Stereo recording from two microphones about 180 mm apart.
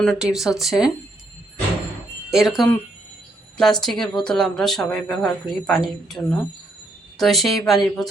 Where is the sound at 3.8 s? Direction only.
Centre (ahead or behind).